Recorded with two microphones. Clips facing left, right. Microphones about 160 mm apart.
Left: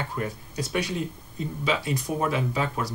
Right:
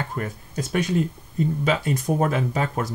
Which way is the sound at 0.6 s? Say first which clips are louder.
Right 5 dB; 50° right (ahead or behind).